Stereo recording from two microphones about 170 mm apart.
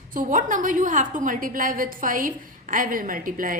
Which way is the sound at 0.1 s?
50° right (ahead or behind).